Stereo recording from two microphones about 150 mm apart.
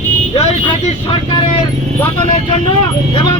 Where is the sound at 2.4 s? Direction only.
30° left (ahead or behind).